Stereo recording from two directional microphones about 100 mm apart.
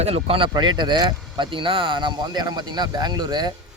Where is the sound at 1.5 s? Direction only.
60° right (ahead or behind).